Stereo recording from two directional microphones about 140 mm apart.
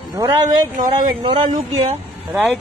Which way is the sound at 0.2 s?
30° right (ahead or behind).